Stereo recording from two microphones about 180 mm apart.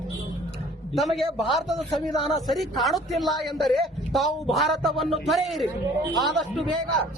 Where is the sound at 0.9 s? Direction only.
Centre (ahead or behind).